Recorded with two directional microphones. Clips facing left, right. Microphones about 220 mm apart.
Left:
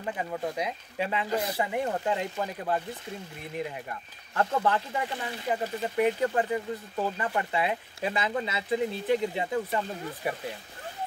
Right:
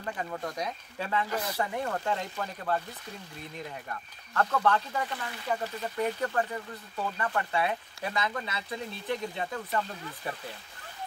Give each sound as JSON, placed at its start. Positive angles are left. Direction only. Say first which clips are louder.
{"t": 0.0, "sound": "speech", "louder": "left 3 dB", "side_deg": 15}
{"t": 4.3, "sound": "speech", "louder": "even", "side_deg": 25}